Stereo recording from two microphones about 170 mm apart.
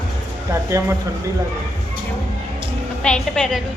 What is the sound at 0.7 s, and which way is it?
Speech, 15° right (ahead or behind).